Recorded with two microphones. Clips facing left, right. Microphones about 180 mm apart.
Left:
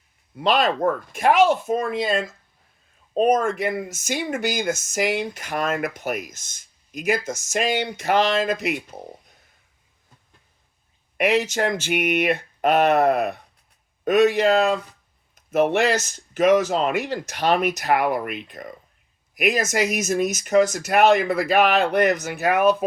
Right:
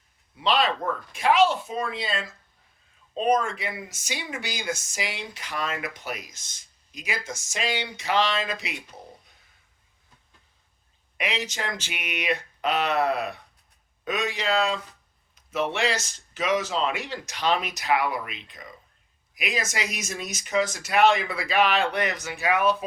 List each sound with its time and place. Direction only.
0.3 s speech: 45° left (ahead or behind)
11.2 s speech: 50° left (ahead or behind)
19.7 s speech: 45° left (ahead or behind)